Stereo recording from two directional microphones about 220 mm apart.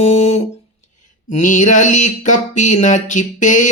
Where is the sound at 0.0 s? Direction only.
30° left (ahead or behind).